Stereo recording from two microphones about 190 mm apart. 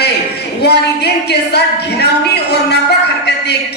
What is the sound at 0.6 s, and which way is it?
Music, 60° left (ahead or behind).